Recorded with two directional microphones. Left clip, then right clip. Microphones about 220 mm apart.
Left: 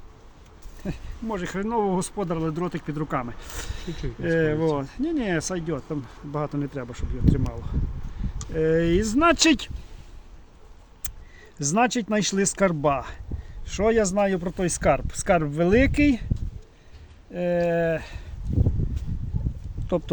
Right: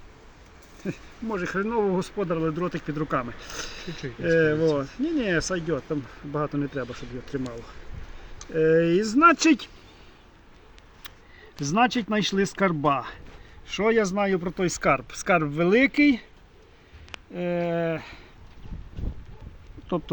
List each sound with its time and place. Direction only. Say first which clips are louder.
0.9 s speech: even; 25° left (ahead or behind)
8.5 s speech: right 2 dB; 20° left (ahead or behind)
11.6 s speech: even; 10° left (ahead or behind)
17.3 s speech: left 4 dB; 30° left (ahead or behind)